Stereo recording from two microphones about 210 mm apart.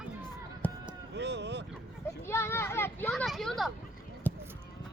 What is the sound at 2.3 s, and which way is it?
Children playing, 10° left (ahead or behind).